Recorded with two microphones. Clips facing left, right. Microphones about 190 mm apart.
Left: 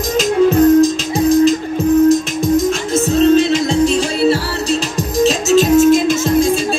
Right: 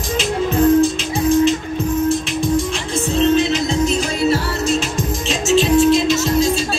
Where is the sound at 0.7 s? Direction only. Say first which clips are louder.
Left 4 dB; 40° left (ahead or behind).